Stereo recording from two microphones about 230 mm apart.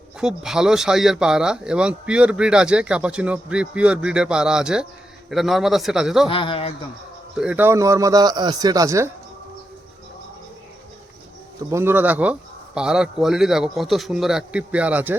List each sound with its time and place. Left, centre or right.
0.2 s speech: centre
6.2 s a man's voice: left
7.3 s speech: centre
11.7 s speech: centre